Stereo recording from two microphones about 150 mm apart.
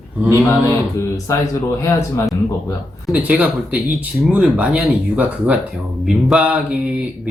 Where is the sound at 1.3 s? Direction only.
20° left (ahead or behind).